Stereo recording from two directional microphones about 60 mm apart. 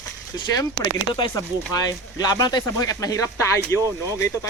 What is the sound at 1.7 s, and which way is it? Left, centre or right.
Speech, left.